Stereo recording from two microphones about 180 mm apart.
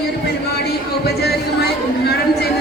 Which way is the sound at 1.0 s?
65° left (ahead or behind).